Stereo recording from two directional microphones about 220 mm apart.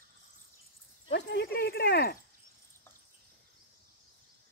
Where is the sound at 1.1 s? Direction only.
50° left (ahead or behind).